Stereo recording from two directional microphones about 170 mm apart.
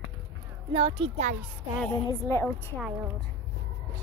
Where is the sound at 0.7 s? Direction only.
30° right (ahead or behind).